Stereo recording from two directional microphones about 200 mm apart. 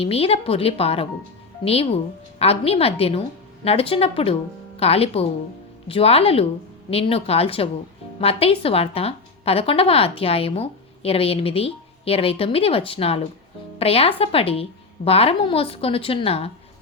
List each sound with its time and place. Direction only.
0.0 s a woman's voice: 30° left (ahead or behind)